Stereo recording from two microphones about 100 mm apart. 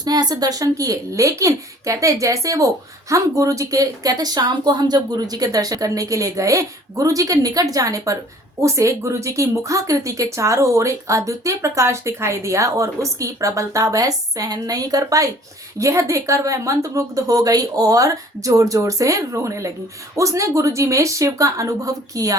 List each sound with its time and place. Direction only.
0.0 s a woman's voice: 40° right (ahead or behind)